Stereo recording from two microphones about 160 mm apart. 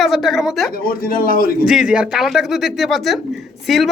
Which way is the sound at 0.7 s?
65° left (ahead or behind).